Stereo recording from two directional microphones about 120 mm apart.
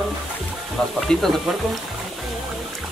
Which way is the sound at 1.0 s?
Centre (ahead or behind).